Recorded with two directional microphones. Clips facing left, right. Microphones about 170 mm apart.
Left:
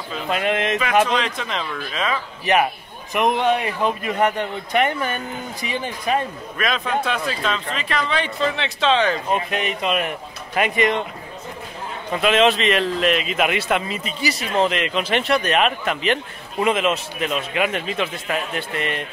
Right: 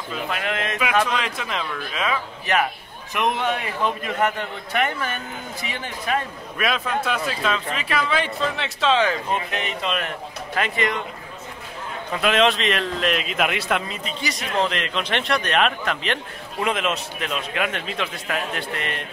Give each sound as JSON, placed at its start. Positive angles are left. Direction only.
{"t": 0.3, "sound": "speech", "side_deg": 20}
{"t": 1.1, "sound": "a man's voice", "side_deg": -5}
{"t": 2.4, "sound": "a man's voice", "side_deg": 20}
{"t": 6.6, "sound": "a man's voice", "side_deg": -5}
{"t": 9.8, "sound": "a man's voice", "side_deg": 10}
{"t": 12.1, "sound": "a man's voice", "side_deg": 0}